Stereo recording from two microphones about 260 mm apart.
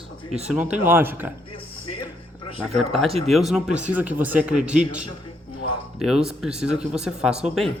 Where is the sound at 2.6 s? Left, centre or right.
Centre.